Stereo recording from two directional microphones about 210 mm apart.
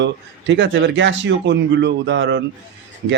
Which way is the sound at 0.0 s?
60° right (ahead or behind).